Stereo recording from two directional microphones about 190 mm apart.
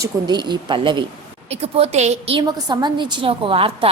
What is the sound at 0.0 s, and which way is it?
A woman's voice, 20° right (ahead or behind).